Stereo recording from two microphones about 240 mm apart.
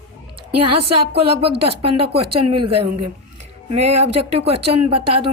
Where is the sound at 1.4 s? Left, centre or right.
Right.